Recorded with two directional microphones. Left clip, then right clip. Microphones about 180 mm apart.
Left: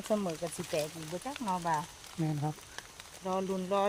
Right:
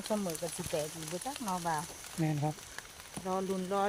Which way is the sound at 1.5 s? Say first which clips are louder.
Left 3 dB; 50° left (ahead or behind).